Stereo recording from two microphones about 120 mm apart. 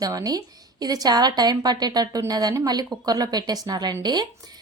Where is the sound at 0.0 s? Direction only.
30° right (ahead or behind).